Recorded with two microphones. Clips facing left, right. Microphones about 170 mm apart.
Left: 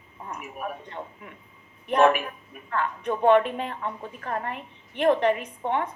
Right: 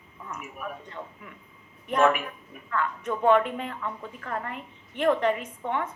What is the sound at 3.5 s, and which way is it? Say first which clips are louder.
A woman's voice: left 2 dB; 30° left (ahead or behind).